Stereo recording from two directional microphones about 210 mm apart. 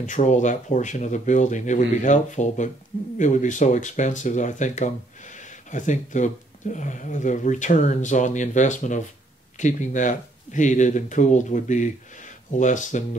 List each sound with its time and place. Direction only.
0.0 s speech: 35° left (ahead or behind)